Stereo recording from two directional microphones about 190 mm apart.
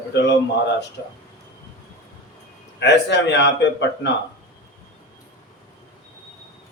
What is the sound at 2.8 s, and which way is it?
A man's voice, 65° left (ahead or behind).